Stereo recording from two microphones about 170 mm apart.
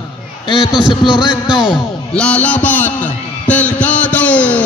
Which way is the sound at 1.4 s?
25° left (ahead or behind).